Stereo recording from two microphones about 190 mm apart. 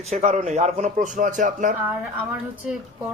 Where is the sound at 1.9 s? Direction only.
10° right (ahead or behind).